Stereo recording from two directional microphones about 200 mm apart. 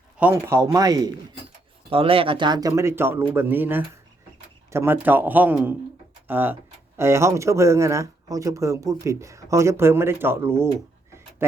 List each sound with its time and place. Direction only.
0.2 s speech: 10° right (ahead or behind)